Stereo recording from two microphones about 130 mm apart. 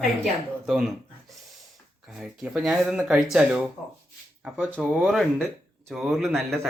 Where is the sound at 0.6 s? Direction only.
5° right (ahead or behind).